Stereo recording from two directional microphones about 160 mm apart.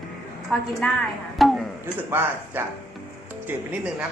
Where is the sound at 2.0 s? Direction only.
15° right (ahead or behind).